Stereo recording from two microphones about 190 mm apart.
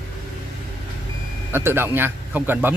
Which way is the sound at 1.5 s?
10° right (ahead or behind).